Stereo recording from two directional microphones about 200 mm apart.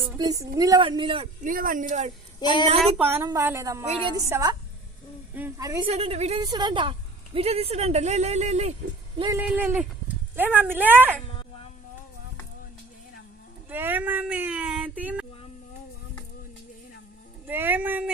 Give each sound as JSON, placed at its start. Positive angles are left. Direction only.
{"t": 0.2, "sound": "a woman's voice", "side_deg": -20}
{"t": 1.5, "sound": "speech", "side_deg": -45}
{"t": 2.4, "sound": "a woman's voice", "side_deg": 20}
{"t": 3.0, "sound": "speech", "side_deg": -10}
{"t": 5.9, "sound": "speech", "side_deg": -30}
{"t": 6.4, "sound": "a woman's voice", "side_deg": -20}
{"t": 9.1, "sound": "a woman's voice", "side_deg": -25}
{"t": 9.5, "sound": "speech", "side_deg": -10}
{"t": 13.7, "sound": "speech", "side_deg": -10}
{"t": 17.4, "sound": "speech", "side_deg": -10}